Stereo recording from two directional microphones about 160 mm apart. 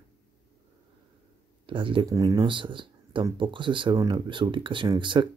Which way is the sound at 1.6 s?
35° right (ahead or behind).